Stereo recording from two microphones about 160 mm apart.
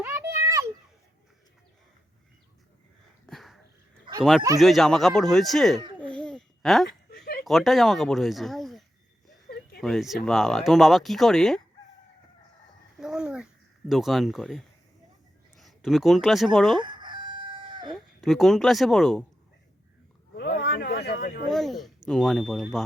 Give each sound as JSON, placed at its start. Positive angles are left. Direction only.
{"t": 0.0, "sound": "a sound", "side_deg": -10}
{"t": 3.2, "sound": "dog", "side_deg": 0}
{"t": 4.2, "sound": "speech", "side_deg": -5}
{"t": 6.0, "sound": "babbling", "side_deg": 5}
{"t": 7.1, "sound": "a sound", "side_deg": 90}
{"t": 7.4, "sound": "speech", "side_deg": 0}
{"t": 9.8, "sound": "speech", "side_deg": 0}
{"t": 13.0, "sound": "a sound", "side_deg": -5}
{"t": 15.5, "sound": "speech", "side_deg": 0}
{"t": 16.7, "sound": "chicken", "side_deg": -30}
{"t": 17.9, "sound": "speech", "side_deg": 0}
{"t": 20.3, "sound": "vehicle", "side_deg": 90}
{"t": 21.5, "sound": "speech", "side_deg": 0}